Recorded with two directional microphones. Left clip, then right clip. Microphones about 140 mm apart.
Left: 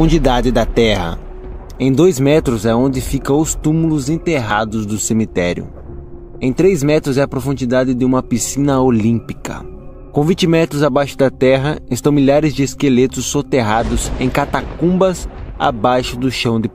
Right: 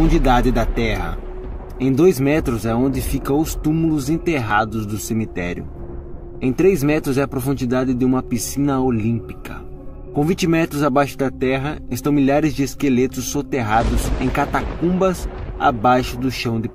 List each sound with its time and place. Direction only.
0.1 s speech: 45° left (ahead or behind)
1.8 s speech: 35° left (ahead or behind)
6.4 s speech: 30° left (ahead or behind); by 9.6 s 50° left (ahead or behind)
10.1 s speech: 30° left (ahead or behind)
15.6 s speech: 35° left (ahead or behind)